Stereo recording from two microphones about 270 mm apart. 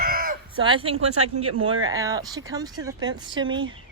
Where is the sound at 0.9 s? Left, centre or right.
Right.